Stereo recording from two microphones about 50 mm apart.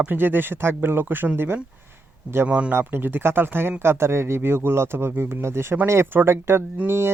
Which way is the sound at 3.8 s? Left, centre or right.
Right.